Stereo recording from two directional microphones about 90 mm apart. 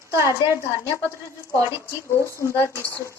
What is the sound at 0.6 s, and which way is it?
A woman's voice, 30° left (ahead or behind).